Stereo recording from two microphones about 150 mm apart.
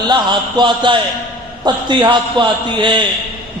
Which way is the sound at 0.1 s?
30° right (ahead or behind).